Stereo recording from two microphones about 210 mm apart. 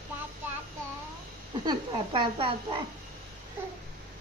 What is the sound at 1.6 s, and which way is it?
A woman's voice, 25° right (ahead or behind).